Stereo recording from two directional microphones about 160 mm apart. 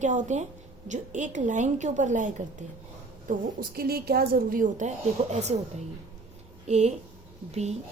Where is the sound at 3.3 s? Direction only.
65° right (ahead or behind); by 5.6 s 45° right (ahead or behind).